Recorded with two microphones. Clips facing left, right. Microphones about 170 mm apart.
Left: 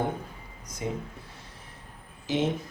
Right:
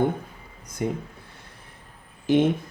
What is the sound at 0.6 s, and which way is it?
Speech, 55° right (ahead or behind).